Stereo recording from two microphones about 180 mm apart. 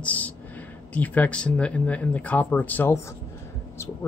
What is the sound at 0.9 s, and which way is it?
Speech, 10° left (ahead or behind).